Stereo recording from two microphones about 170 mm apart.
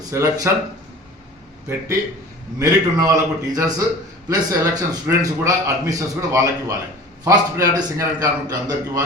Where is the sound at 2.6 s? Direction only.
20° right (ahead or behind).